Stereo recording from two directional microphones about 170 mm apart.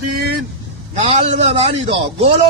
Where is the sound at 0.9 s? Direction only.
40° right (ahead or behind).